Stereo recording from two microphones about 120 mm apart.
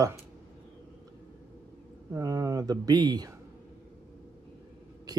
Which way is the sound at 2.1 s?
30° right (ahead or behind).